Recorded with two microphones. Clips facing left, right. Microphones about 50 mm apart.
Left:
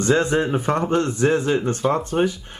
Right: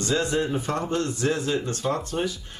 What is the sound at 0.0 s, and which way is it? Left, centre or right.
Speech, left.